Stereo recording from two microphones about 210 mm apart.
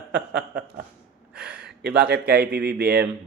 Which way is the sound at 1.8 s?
50° right (ahead or behind).